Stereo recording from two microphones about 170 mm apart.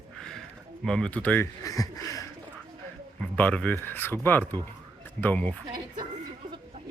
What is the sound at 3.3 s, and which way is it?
Speech, 10° left (ahead or behind).